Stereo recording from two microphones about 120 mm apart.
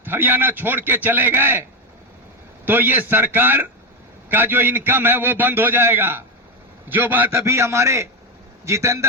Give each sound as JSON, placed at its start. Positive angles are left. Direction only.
{"t": 0.0, "sound": "a man's voice", "side_deg": -15}
{"t": 2.6, "sound": "a man's voice", "side_deg": -15}